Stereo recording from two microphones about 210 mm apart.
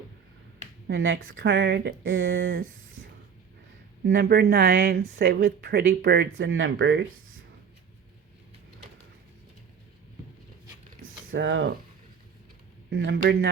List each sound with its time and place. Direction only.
0.9 s speech: 60° right (ahead or behind)
1.5 s speech: 55° right (ahead or behind)
4.0 s speech: 50° right (ahead or behind)
6.3 s speech: 70° right (ahead or behind)
11.3 s speech: 65° right (ahead or behind)
12.9 s speech: 55° right (ahead or behind)